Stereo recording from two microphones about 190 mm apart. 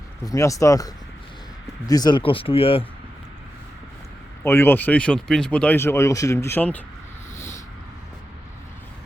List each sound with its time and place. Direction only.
0.3 s speech: 15° left (ahead or behind)
4.4 s speech: 10° left (ahead or behind)
7.3 s a sound: 15° left (ahead or behind)